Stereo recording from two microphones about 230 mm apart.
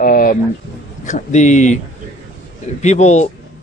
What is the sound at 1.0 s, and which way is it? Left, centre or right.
Speech, left.